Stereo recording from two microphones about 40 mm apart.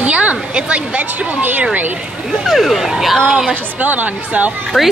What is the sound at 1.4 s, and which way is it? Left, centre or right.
Speech, right.